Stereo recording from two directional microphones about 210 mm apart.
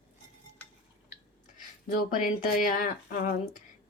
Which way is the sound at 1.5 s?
40° left (ahead or behind).